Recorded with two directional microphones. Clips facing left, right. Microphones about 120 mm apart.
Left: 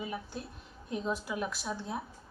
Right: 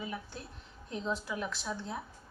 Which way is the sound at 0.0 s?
15° left (ahead or behind).